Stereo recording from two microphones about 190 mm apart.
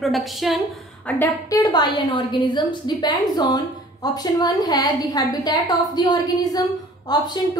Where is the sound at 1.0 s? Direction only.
15° left (ahead or behind).